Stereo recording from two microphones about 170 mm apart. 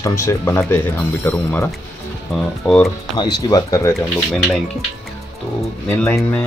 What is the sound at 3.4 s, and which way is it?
Speech, 20° left (ahead or behind).